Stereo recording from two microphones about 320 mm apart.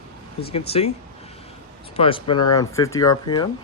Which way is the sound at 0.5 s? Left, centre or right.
Centre.